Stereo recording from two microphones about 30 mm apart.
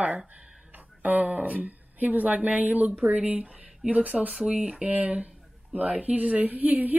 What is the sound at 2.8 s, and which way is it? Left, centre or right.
A woman's voice, right.